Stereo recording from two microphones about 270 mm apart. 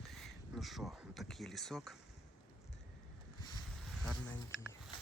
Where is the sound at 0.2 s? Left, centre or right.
Centre.